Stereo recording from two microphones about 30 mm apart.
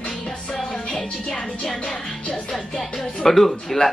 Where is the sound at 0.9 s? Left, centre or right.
Left.